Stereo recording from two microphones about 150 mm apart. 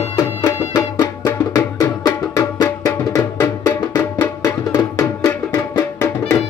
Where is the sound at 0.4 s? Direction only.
25° left (ahead or behind).